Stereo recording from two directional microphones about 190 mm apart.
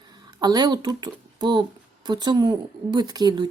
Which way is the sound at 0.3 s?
20° right (ahead or behind).